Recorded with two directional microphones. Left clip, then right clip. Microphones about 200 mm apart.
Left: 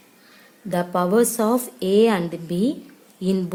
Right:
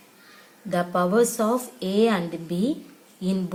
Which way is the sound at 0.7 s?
40° left (ahead or behind).